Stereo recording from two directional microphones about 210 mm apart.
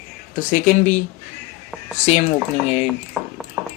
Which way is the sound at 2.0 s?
30° left (ahead or behind).